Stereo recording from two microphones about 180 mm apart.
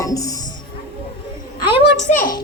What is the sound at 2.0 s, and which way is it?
Speech, 45° left (ahead or behind).